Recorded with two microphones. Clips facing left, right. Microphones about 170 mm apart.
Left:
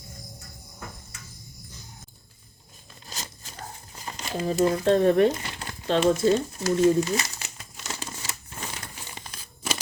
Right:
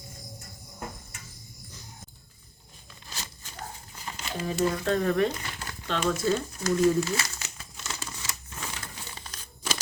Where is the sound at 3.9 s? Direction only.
35° left (ahead or behind).